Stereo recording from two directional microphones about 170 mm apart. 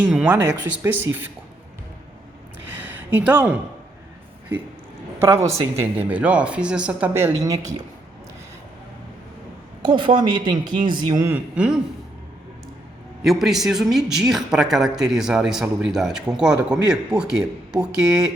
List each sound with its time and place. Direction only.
0.0 s speech: 10° right (ahead or behind)
2.8 s speech: 10° right (ahead or behind)
5.2 s speech: 15° right (ahead or behind)
9.8 s a woman's voice: 30° right (ahead or behind)
11.1 s speech: 15° right (ahead or behind)
13.2 s speech: centre (ahead or behind)